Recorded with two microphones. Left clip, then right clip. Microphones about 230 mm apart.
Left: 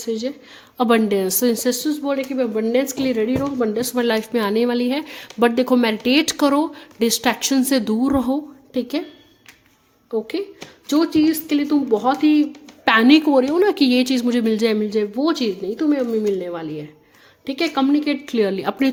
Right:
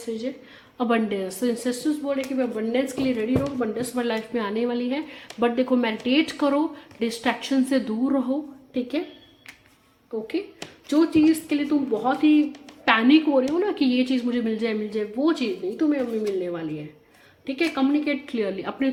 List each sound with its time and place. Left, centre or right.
0.0 s speech: left
10.1 s speech: left